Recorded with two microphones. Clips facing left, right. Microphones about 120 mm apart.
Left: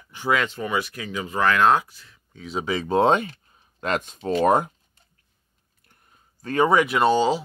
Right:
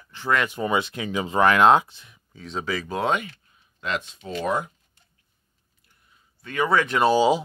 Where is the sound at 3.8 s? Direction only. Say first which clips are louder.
Left 3 dB; 45° left (ahead or behind).